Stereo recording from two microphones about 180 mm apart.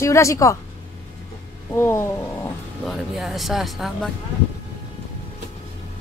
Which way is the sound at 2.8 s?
Centre (ahead or behind).